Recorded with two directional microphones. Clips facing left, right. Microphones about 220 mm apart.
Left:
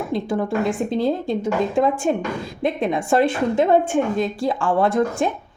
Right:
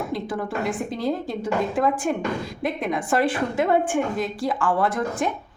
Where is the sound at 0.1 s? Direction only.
25° left (ahead or behind).